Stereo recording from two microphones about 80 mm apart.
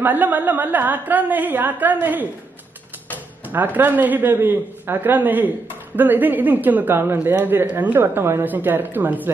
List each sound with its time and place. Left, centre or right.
0.0 s a woman's voice: right
3.4 s a woman's voice: right